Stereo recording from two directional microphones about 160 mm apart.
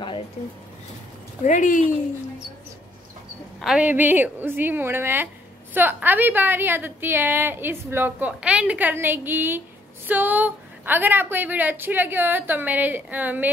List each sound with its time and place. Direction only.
1.4 s speech: 50° left (ahead or behind)
3.6 s a woman's voice: 10° right (ahead or behind)